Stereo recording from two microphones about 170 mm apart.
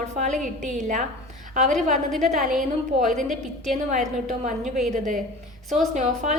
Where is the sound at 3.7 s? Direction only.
45° right (ahead or behind).